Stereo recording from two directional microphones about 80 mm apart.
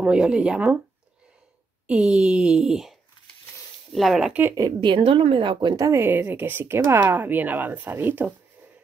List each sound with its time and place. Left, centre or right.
0.0 s speech: centre
1.9 s speech: centre
4.3 s speech: right
4.6 s a woman's voice: right
4.8 s a woman's voice: right
5.8 s speech: right
6.0 s speech: right